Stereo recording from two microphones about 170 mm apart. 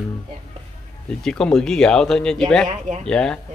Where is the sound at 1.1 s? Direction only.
5° left (ahead or behind).